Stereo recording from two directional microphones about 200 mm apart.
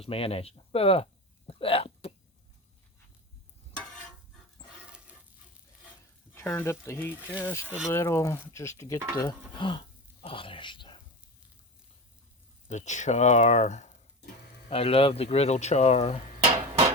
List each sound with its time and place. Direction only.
0.0 s speech: 30° left (ahead or behind)
1.5 s hiccup: 30° left (ahead or behind)
6.3 s speech: 10° left (ahead or behind)
12.6 s speech: 35° left (ahead or behind)